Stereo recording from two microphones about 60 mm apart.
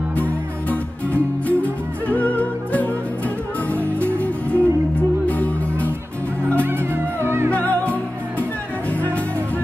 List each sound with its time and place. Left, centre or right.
0.2 s music: left
6.6 s music: right
7.5 s music: left